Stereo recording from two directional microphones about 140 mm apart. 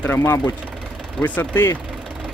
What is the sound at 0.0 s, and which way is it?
Speech, 15° left (ahead or behind).